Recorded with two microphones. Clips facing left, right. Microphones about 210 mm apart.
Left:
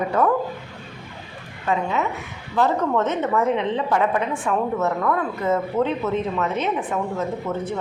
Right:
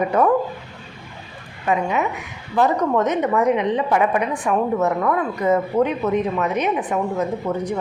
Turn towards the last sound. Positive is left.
turn(degrees=-15)  # may be behind; listen again after turning